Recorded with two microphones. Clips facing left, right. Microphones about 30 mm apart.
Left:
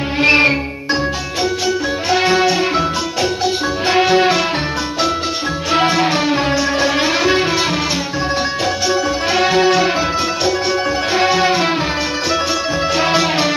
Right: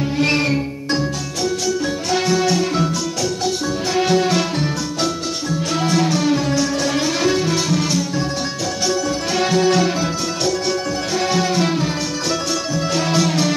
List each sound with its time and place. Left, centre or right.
0.2 s music: left
2.0 s music: left
3.9 s music: left
5.7 s music: left
8.8 s music: left
11.1 s music: left
12.9 s music: left